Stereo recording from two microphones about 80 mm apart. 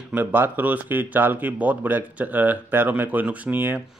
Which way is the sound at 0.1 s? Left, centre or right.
Right.